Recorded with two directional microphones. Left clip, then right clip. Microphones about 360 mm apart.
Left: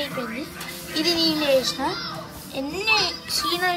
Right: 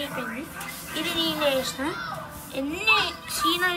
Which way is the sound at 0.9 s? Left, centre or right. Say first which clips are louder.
Left 5 dB; left.